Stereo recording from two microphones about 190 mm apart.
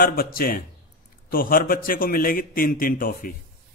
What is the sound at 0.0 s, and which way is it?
Speech, 50° left (ahead or behind).